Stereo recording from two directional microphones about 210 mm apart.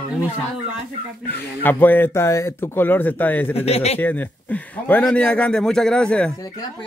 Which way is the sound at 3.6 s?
30° left (ahead or behind).